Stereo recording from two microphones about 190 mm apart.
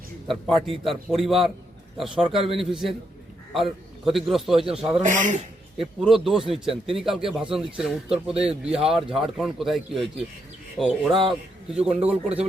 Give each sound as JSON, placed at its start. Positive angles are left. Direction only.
{"t": 0.3, "sound": "a man's voice", "side_deg": 0}
{"t": 5.0, "sound": "speech", "side_deg": -40}
{"t": 5.7, "sound": "a man's voice", "side_deg": 0}